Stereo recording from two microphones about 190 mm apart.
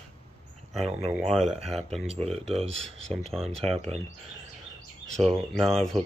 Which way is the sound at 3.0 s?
Centre (ahead or behind).